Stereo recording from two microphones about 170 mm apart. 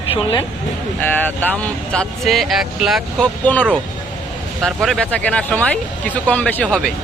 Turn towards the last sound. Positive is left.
turn(degrees=5)  # may be behind; listen again after turning